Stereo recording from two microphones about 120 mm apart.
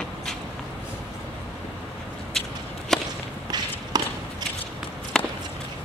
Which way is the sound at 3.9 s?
35° right (ahead or behind).